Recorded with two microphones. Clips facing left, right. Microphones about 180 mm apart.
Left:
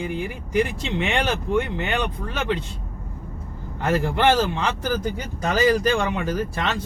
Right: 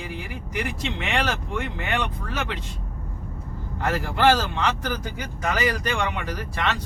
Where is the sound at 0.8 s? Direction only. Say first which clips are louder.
Left 3 dB; 30° left (ahead or behind).